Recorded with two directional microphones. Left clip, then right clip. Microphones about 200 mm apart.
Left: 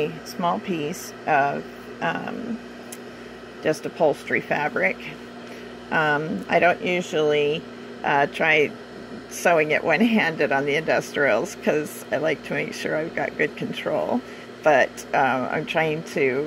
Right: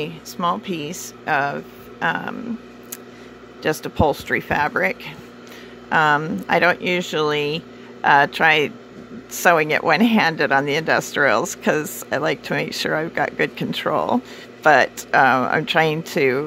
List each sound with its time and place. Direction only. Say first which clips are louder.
0.0 s speech: right 1 dB; 20° right (ahead or behind)
3.8 s speech: right 2 dB; 35° right (ahead or behind)